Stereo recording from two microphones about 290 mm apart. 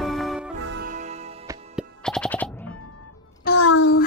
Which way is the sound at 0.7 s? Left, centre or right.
Right.